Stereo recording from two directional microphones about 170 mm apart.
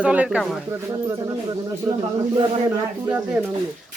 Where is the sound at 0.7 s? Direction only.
20° right (ahead or behind).